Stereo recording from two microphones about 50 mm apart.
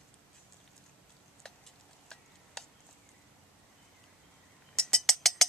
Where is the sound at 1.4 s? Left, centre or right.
Centre.